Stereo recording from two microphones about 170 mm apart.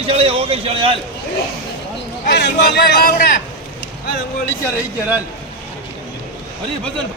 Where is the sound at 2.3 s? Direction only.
80° left.